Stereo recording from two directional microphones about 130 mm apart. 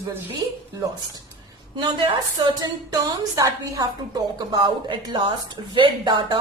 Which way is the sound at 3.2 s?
25° right (ahead or behind).